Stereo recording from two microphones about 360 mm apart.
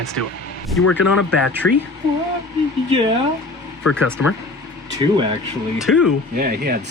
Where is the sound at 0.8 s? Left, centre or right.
Left.